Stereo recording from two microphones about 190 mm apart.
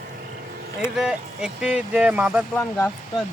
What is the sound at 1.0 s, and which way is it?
Speech, 5° right (ahead or behind).